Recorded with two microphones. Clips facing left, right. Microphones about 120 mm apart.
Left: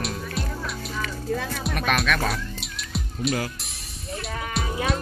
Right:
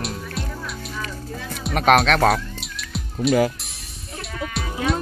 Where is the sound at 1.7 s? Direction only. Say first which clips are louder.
Right 9 dB; 75° right (ahead or behind).